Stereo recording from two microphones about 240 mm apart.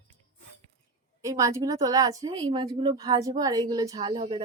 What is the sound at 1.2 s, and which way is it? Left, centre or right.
A woman's voice, centre.